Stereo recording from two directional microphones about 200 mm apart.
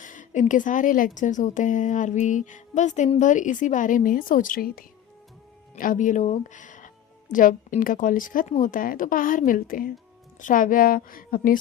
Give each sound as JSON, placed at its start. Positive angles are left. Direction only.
{"t": 0.0, "sound": "a woman's voice", "side_deg": 40}